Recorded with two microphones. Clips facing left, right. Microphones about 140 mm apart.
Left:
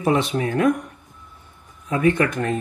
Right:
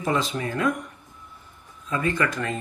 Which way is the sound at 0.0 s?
65° left (ahead or behind).